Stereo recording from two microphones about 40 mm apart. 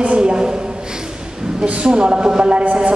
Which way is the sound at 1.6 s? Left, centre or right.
Right.